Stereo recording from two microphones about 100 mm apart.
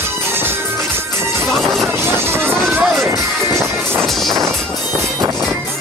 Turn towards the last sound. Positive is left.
turn(degrees=5)  # may be behind; listen again after turning